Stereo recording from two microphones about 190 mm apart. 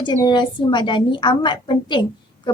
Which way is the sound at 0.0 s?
25° left (ahead or behind).